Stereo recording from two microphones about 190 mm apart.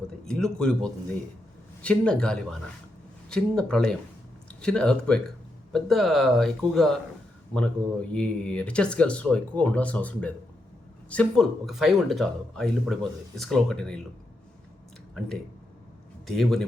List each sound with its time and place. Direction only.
0.3 s speech: 5° left (ahead or behind)
8.1 s speech: 5° left (ahead or behind)
16.2 s speech: centre (ahead or behind)